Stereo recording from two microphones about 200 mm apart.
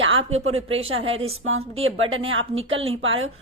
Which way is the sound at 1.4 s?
90° right.